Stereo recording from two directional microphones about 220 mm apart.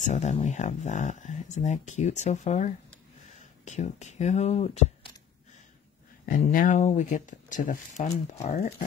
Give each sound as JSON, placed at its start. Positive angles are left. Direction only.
{"t": 0.0, "sound": "speech", "side_deg": 30}
{"t": 6.2, "sound": "speech", "side_deg": 40}